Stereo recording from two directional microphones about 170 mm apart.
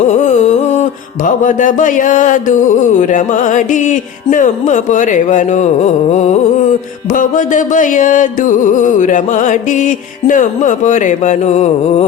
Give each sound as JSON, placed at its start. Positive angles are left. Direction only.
{"t": 0.0, "sound": "music", "side_deg": 45}